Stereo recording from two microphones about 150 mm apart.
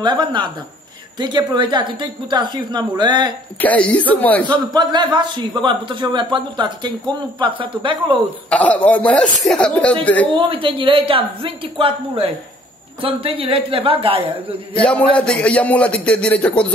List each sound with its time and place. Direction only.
0.0 s a man's voice: 30° right (ahead or behind)
3.6 s speech: 10° left (ahead or behind)
4.5 s a man's voice: 30° right (ahead or behind)
8.5 s speech: 10° left (ahead or behind)
10.3 s a man's voice: 35° right (ahead or behind)
14.8 s speech: 10° left (ahead or behind)